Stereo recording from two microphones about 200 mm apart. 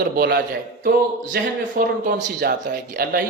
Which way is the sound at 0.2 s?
50° right (ahead or behind).